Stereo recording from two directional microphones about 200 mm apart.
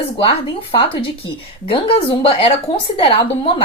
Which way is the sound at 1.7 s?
25° left (ahead or behind).